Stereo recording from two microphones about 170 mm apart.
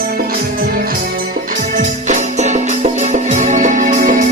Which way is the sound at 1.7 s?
45° right (ahead or behind).